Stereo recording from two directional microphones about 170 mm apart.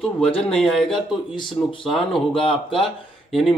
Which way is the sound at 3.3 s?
Centre (ahead or behind).